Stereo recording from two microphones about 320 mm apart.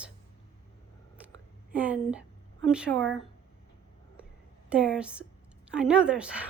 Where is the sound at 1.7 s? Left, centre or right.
Centre.